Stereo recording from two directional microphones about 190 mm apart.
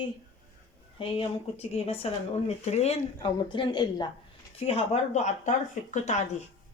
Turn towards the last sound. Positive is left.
turn(degrees=40)  # may be behind; listen again after turning